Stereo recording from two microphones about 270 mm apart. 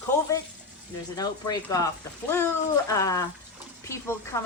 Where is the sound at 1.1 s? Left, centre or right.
Centre.